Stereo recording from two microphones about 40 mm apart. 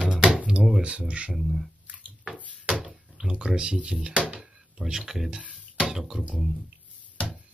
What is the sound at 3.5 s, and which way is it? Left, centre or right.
Speech, right.